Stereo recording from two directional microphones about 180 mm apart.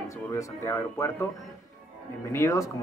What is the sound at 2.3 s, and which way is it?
Speech, 15° left (ahead or behind).